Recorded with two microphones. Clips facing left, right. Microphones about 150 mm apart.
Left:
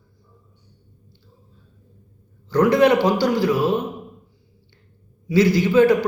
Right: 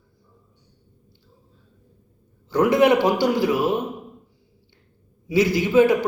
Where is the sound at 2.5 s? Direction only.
20° right (ahead or behind).